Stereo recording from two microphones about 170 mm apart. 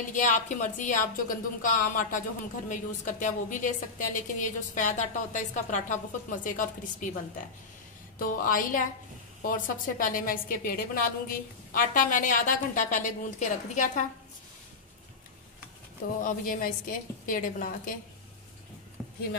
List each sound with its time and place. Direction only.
0.1 s a woman's voice: 45° left (ahead or behind)
16.2 s a woman's voice: 55° left (ahead or behind)
19.0 s a sound: centre (ahead or behind)